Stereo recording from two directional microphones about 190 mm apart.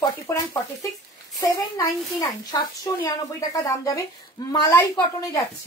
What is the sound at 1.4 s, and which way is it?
A woman's voice, 20° left (ahead or behind).